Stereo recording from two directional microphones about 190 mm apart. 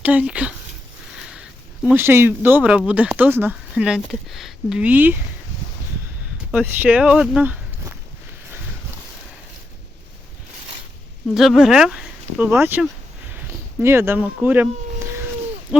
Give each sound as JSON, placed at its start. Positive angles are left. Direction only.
{"t": 0.0, "sound": "speech", "side_deg": -5}
{"t": 6.5, "sound": "speech", "side_deg": -10}
{"t": 11.3, "sound": "speech", "side_deg": 0}
{"t": 14.4, "sound": "a sound", "side_deg": -10}
{"t": 15.7, "sound": "hoot", "side_deg": -5}